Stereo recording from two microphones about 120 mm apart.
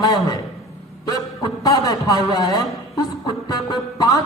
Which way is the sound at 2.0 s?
30° left (ahead or behind).